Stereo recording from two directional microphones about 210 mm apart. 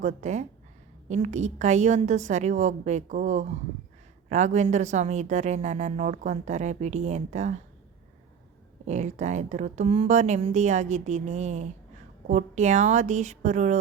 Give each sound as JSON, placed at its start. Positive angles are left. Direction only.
{"t": 0.0, "sound": "a woman's voice", "side_deg": -35}
{"t": 8.9, "sound": "a woman's voice", "side_deg": -35}